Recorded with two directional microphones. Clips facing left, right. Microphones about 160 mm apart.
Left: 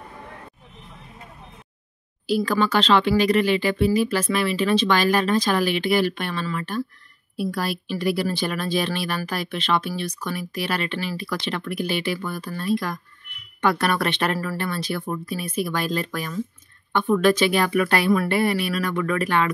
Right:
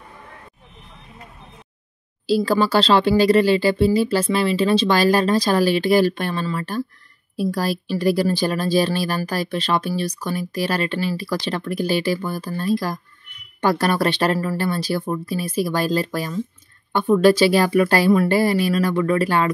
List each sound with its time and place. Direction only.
2.2 s speech: 30° right (ahead or behind)